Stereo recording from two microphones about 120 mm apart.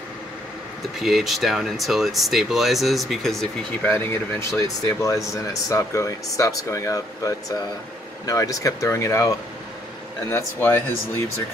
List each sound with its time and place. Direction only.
1.0 s speech: centre (ahead or behind)
3.9 s speech: 25° left (ahead or behind)
10.3 s speech: 20° left (ahead or behind)